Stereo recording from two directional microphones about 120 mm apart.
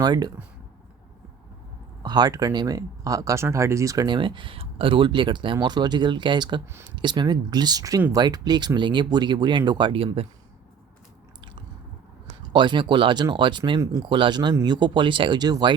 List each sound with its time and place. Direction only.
0.0 s speech: 35° right (ahead or behind)
2.0 s speech: 35° right (ahead or behind)
4.0 s speech: 40° right (ahead or behind)
12.5 s speech: 40° right (ahead or behind)
14.0 s speech: 40° right (ahead or behind)